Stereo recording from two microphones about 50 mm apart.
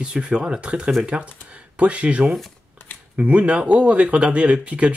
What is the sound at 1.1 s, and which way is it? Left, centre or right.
Speech, right.